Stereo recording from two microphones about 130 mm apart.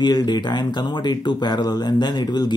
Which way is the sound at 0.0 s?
35° left (ahead or behind).